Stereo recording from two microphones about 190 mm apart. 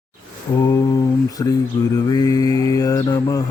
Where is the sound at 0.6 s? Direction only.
20° left (ahead or behind).